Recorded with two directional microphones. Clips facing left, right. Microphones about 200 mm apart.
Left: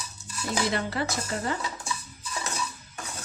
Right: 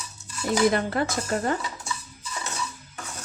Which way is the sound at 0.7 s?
50° right (ahead or behind).